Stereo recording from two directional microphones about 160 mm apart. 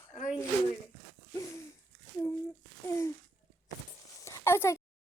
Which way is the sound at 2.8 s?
15° left (ahead or behind).